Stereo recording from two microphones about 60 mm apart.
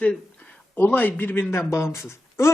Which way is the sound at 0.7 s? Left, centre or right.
Left.